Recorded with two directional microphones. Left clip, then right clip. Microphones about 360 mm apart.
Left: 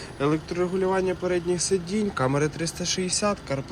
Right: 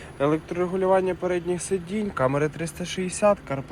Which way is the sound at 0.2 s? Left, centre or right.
Centre.